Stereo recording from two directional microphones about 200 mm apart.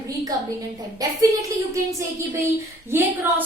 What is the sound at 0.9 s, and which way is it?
A woman's voice, 15° right (ahead or behind).